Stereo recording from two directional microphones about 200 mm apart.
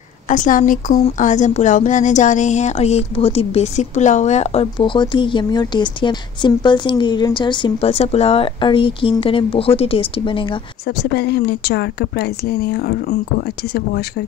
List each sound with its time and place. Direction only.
0.3 s speech: 40° left (ahead or behind)
11.0 s speech: 55° left (ahead or behind)